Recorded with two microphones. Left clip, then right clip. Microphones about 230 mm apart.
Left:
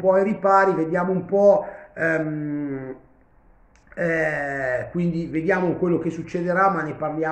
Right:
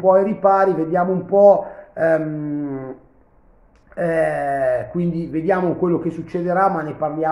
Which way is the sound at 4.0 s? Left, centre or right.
Centre.